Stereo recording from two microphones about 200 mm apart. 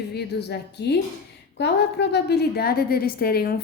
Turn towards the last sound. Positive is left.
turn(degrees=50)  # may be behind; listen again after turning